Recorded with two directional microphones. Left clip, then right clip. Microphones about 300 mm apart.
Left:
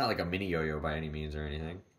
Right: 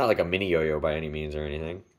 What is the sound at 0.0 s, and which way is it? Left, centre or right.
Speech, centre.